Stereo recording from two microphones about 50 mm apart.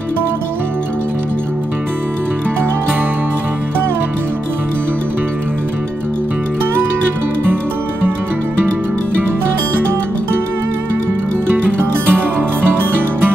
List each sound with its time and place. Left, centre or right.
11.5 s music: right